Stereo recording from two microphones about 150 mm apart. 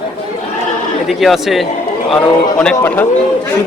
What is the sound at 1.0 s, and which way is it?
Speech, centre (ahead or behind).